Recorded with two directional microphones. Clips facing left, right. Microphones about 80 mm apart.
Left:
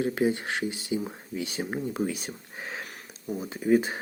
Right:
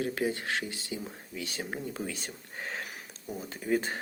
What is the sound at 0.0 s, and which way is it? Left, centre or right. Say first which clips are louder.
Speech: left 5 dB; left.